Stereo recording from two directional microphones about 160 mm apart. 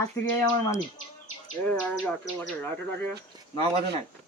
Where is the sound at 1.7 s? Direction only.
5° left (ahead or behind).